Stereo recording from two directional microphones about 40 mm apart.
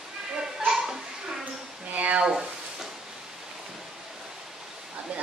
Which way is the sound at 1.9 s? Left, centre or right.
Right.